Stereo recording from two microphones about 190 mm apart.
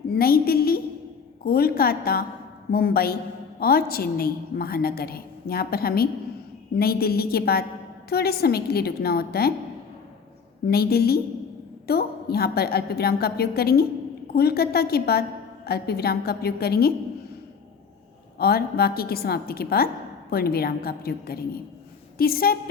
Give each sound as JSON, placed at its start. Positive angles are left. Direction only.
{"t": 0.1, "sound": "a sound", "side_deg": 50}
{"t": 1.5, "sound": "a woman's voice", "side_deg": 55}
{"t": 10.7, "sound": "a woman's voice", "side_deg": 55}
{"t": 18.3, "sound": "a woman's voice", "side_deg": 55}